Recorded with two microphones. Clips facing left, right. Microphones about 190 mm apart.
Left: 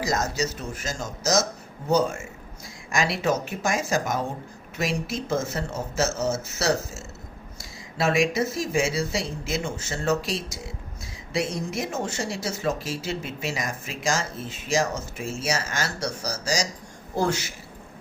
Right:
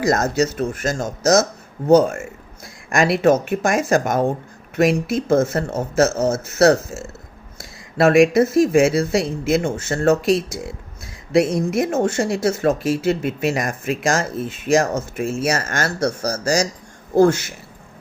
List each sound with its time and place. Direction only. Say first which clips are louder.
0.0 s speech: right 8 dB; 60° right (ahead or behind)